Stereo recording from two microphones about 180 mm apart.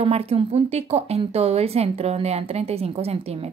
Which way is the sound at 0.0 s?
35° right (ahead or behind).